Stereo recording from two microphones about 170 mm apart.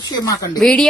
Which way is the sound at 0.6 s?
5° left (ahead or behind).